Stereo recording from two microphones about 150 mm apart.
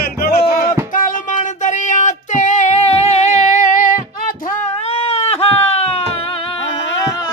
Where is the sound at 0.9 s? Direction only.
60° left (ahead or behind).